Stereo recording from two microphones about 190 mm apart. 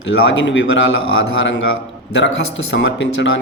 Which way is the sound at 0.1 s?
70° left (ahead or behind).